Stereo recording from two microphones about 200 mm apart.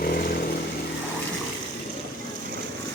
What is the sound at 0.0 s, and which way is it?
Vehicle, 50° left (ahead or behind).